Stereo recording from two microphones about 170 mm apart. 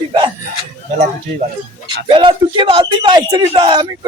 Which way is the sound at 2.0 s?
25° right (ahead or behind).